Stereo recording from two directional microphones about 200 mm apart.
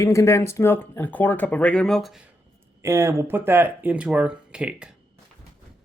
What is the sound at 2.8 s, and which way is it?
Speech, 15° right (ahead or behind).